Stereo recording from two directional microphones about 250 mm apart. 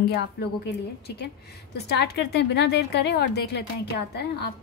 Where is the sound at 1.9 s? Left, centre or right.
Left.